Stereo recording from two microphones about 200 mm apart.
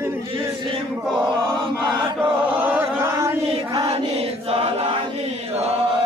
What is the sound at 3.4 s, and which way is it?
Chant, 30° right (ahead or behind).